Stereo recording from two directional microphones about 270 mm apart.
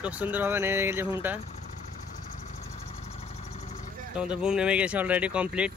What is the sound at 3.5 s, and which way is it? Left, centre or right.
Vehicle, left.